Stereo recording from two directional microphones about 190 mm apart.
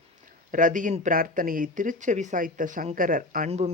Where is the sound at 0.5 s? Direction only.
45° right (ahead or behind).